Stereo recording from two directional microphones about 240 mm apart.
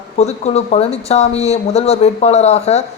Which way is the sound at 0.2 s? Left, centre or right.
Left.